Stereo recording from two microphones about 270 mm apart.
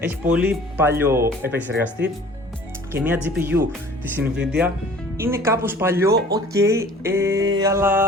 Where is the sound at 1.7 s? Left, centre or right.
Right.